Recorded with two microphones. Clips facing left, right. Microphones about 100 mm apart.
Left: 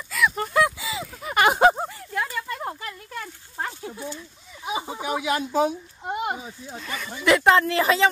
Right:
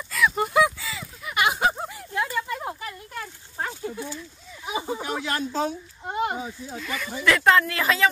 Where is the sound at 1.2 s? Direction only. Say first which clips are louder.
Left 5 dB; 45° left (ahead or behind).